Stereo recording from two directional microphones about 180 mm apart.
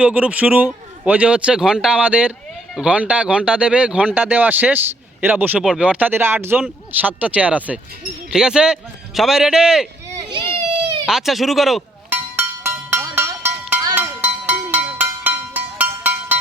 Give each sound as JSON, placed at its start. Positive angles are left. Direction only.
{"t": 0.0, "sound": "speech", "side_deg": -5}
{"t": 10.2, "sound": "speech", "side_deg": -25}
{"t": 11.0, "sound": "speech", "side_deg": 0}
{"t": 12.4, "sound": "music", "side_deg": -10}